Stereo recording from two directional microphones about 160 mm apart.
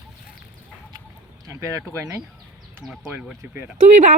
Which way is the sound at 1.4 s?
20° right (ahead or behind).